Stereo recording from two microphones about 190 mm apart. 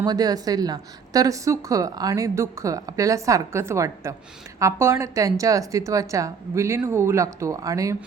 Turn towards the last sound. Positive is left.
turn(degrees=-15)  # may be behind; listen again after turning